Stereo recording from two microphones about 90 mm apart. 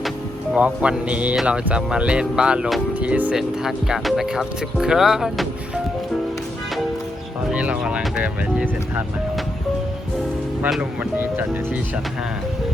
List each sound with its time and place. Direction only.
0.5 s speech: 10° right (ahead or behind)
7.5 s speech: 15° right (ahead or behind)